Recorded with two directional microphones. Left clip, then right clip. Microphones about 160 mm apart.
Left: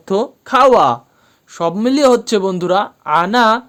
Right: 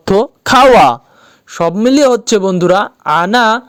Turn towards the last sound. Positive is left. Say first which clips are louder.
# right 2 dB
turn(degrees=-50)  # may be behind; listen again after turning